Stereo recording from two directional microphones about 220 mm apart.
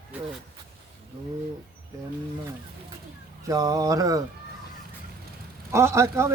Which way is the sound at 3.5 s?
15° right (ahead or behind).